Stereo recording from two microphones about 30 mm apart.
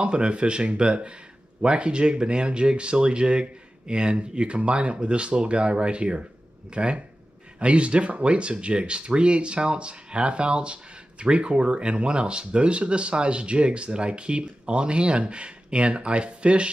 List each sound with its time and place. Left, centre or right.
0.0 s speech: right